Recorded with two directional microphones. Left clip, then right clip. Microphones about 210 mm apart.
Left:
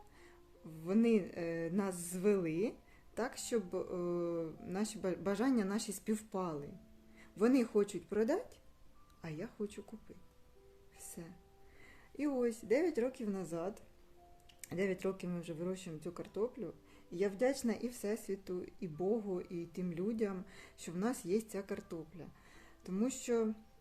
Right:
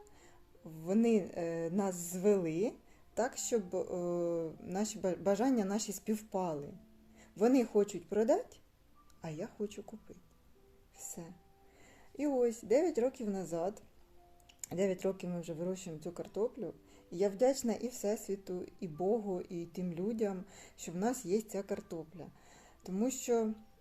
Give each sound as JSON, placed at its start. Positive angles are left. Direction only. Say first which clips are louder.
{"t": 0.8, "sound": "speech", "louder": "right 2 dB", "side_deg": 0}
{"t": 10.9, "sound": "music", "louder": "right 4 dB", "side_deg": 0}
{"t": 12.1, "sound": "speech", "louder": "right 4 dB", "side_deg": 0}